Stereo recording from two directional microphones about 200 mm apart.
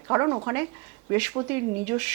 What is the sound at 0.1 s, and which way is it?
A woman's voice, 20° right (ahead or behind).